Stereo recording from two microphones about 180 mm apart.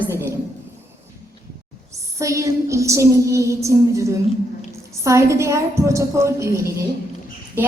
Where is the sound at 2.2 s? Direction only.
15° right (ahead or behind).